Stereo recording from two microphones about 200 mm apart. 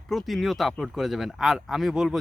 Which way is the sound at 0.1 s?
Centre (ahead or behind).